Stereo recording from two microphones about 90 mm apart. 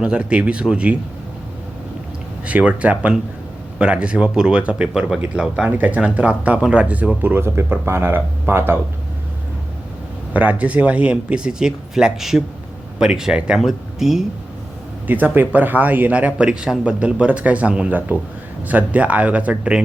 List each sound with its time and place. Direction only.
0.0 s speech: 10° right (ahead or behind)
2.5 s speech: 15° right (ahead or behind)
10.3 s speech: 15° right (ahead or behind)
15.0 s speech: 20° right (ahead or behind)